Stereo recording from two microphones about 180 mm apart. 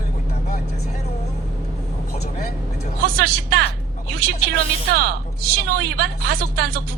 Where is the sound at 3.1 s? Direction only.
60° right (ahead or behind).